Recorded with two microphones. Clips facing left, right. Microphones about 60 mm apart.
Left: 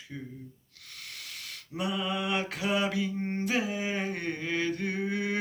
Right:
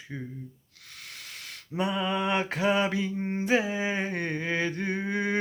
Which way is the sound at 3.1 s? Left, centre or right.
Centre.